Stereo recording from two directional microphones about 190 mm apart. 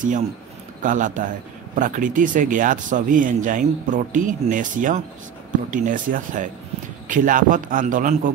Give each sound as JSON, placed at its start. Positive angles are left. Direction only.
{"t": 0.8, "sound": "speech", "side_deg": -40}